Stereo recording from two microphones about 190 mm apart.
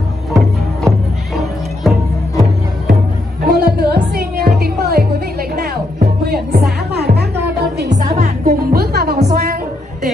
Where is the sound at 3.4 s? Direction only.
55° right (ahead or behind).